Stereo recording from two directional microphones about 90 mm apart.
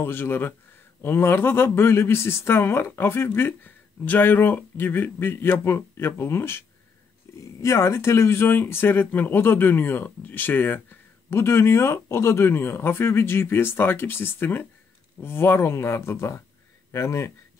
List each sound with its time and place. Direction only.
0.0 s speech: 25° left (ahead or behind)